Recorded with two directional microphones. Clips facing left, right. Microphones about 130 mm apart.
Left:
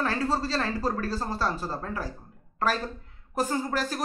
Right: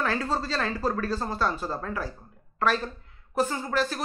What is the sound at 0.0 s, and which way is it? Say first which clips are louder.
A woman's voice: left 1 dB; 35° left (ahead or behind).